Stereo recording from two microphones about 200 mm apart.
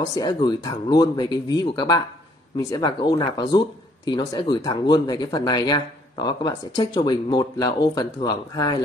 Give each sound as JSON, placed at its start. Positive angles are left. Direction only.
{"t": 0.1, "sound": "speech", "side_deg": 20}